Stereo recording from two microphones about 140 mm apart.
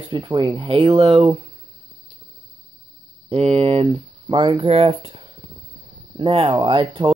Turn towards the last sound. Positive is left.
turn(degrees=-35)  # may be behind; listen again after turning